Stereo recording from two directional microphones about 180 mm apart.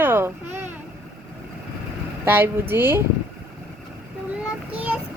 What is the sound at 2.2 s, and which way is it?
Speech, 10° right (ahead or behind).